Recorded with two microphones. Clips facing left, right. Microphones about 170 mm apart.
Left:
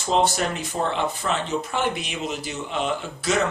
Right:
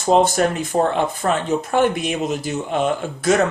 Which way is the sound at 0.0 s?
50° right (ahead or behind).